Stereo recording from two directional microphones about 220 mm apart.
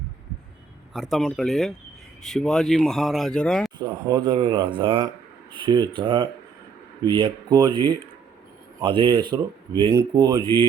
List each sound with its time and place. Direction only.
0.9 s speech: centre (ahead or behind)
3.8 s speech: 20° right (ahead or behind)